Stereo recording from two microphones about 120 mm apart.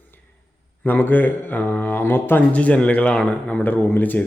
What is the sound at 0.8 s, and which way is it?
Speech, 15° left (ahead or behind).